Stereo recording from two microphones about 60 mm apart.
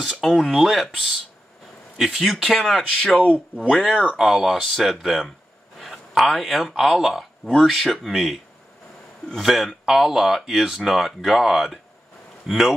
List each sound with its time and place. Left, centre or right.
0.0 s speech: centre
3.3 s speech: right
3.7 s speech: centre
5.8 s a sound: centre
6.8 s speech: centre
9.4 s speech: centre